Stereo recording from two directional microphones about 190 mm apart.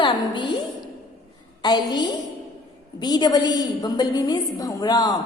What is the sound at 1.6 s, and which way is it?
A woman's voice, 25° left (ahead or behind).